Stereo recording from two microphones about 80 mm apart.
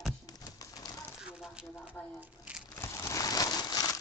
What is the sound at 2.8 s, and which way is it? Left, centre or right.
Crumpling, left.